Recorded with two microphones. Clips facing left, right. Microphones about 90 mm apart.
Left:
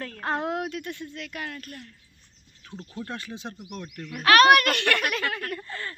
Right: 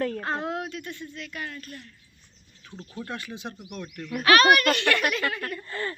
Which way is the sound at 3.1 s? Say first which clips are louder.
Right 2 dB; 30° left (ahead or behind).